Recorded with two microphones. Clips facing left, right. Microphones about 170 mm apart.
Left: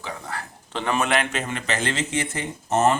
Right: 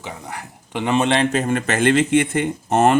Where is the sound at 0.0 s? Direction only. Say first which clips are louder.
Right 1 dB; 20° right (ahead or behind); by 1.5 s 35° right (ahead or behind).